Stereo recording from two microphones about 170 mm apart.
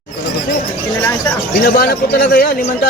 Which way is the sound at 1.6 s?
65° left (ahead or behind).